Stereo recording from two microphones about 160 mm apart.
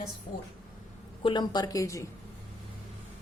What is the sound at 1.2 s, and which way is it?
Speech, 30° left (ahead or behind).